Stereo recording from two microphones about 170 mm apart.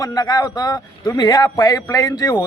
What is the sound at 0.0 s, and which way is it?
Speech, 20° left (ahead or behind).